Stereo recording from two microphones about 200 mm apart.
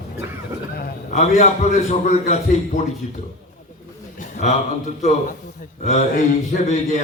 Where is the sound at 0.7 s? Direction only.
50° left (ahead or behind).